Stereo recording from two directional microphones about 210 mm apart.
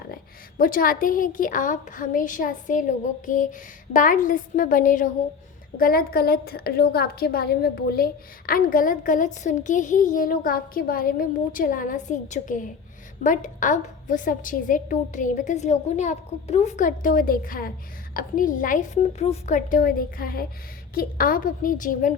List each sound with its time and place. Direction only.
0.6 s a woman's voice: 40° left (ahead or behind)